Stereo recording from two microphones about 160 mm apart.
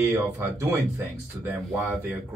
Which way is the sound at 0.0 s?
15° right (ahead or behind).